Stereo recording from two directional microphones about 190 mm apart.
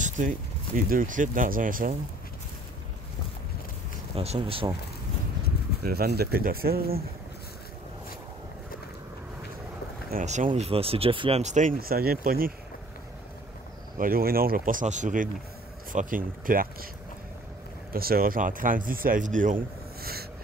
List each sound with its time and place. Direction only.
0.7 s speech: 45° right (ahead or behind)
4.1 s speech: 30° right (ahead or behind)
5.9 s speech: 55° right (ahead or behind)
10.1 s speech: 40° right (ahead or behind)
13.9 s speech: 50° right (ahead or behind)
17.9 s speech: 50° right (ahead or behind)